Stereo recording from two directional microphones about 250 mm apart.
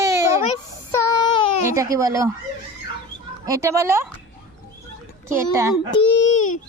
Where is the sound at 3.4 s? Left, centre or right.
Centre.